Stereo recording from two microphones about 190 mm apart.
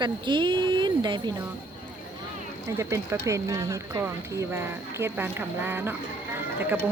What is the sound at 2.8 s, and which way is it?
Speech, 15° right (ahead or behind).